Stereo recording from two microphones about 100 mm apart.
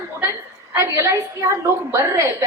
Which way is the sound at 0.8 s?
35° right (ahead or behind).